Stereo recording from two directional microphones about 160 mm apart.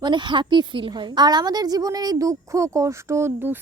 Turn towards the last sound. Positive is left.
turn(degrees=-10)  # may be behind; listen again after turning